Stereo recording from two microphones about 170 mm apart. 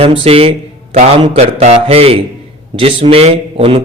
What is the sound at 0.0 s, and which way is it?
A man's voice, 35° right (ahead or behind).